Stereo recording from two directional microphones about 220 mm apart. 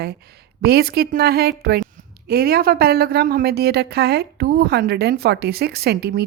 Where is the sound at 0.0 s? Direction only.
45° right (ahead or behind).